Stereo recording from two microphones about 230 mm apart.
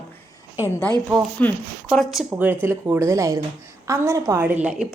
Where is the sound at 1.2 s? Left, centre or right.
Centre.